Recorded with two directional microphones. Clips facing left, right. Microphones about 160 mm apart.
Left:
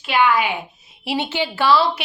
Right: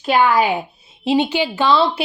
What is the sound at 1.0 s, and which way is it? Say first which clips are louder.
A woman's voice: right 6 dB; 20° right (ahead or behind).